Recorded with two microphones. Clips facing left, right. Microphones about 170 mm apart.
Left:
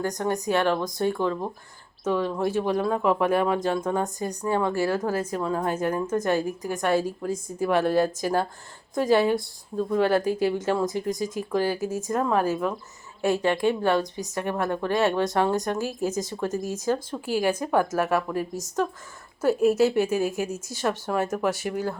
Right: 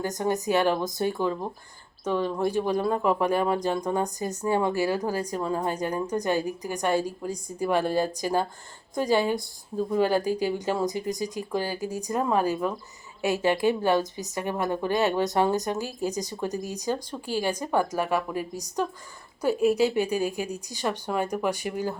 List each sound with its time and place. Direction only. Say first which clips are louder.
0.3 s a woman's voice: right 1 dB; centre (ahead or behind)
4.4 s speech: even; 15° right (ahead or behind)
4.9 s a woman's voice: left 1 dB; centre (ahead or behind)
19.8 s a woman's voice: left 2 dB; centre (ahead or behind)